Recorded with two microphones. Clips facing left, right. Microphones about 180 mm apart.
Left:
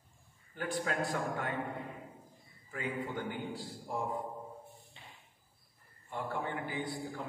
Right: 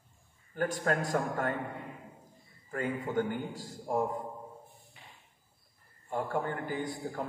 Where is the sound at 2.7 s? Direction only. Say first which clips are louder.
Right 5 dB; 45° right (ahead or behind).